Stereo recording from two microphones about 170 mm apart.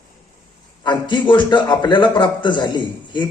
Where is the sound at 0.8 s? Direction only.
25° left (ahead or behind).